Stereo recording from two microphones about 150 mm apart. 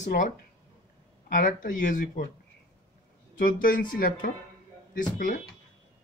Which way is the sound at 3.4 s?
70° left (ahead or behind).